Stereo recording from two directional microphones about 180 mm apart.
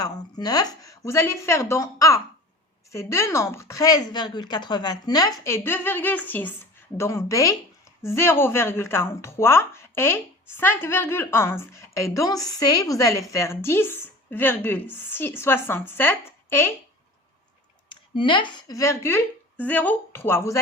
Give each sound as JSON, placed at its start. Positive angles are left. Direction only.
{"t": 0.0, "sound": "speech", "side_deg": 20}
{"t": 17.8, "sound": "speech", "side_deg": 25}